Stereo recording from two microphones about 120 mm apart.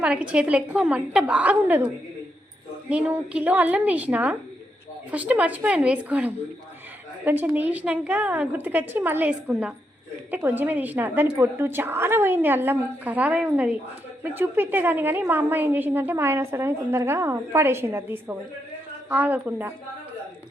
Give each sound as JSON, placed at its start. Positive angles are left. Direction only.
{"t": 0.0, "sound": "a woman's voice", "side_deg": -10}
{"t": 2.9, "sound": "a woman's voice", "side_deg": -10}